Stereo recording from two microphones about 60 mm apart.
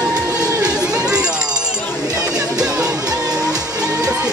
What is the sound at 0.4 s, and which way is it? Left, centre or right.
Crowd, right.